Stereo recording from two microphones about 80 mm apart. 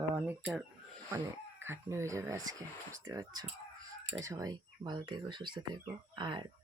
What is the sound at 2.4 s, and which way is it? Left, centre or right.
Speech, right.